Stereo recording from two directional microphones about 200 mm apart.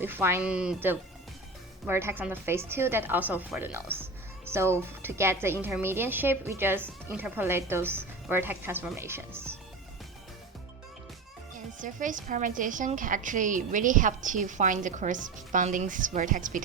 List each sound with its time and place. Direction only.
0.0 s a woman's voice: 10° right (ahead or behind)
11.8 s a woman's voice: 40° right (ahead or behind)